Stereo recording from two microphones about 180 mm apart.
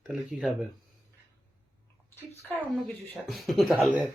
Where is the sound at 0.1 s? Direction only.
Centre (ahead or behind).